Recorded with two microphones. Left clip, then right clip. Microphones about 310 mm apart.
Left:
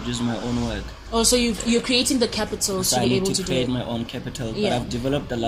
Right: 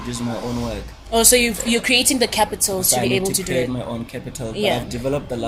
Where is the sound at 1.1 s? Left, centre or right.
Right.